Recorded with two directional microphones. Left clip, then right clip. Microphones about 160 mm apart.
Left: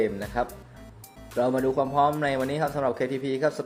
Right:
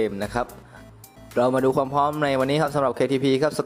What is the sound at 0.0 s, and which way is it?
Speech, 30° right (ahead or behind).